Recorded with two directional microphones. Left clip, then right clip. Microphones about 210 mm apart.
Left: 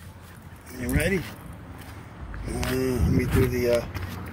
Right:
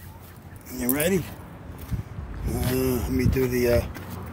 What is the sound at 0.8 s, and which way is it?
Speech, 15° right (ahead or behind).